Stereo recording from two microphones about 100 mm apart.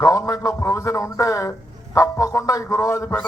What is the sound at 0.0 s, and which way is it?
A man's voice, 30° left (ahead or behind).